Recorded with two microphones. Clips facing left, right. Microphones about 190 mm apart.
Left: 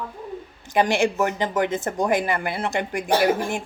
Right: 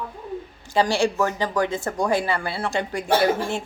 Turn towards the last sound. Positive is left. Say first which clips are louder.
# even
turn(degrees=15)  # may be behind; listen again after turning